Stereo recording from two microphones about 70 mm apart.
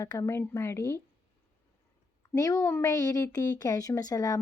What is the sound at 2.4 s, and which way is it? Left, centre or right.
Speech, left.